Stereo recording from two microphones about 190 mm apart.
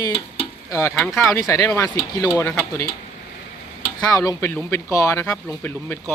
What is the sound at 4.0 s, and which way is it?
Speech, 20° left (ahead or behind).